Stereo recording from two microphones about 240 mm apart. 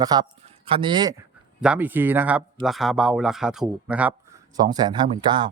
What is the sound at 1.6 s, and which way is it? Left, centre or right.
Speech, centre.